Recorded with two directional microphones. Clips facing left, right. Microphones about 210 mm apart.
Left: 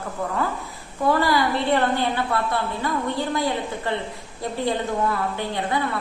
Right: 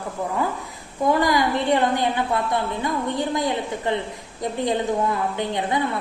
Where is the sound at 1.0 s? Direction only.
15° right (ahead or behind).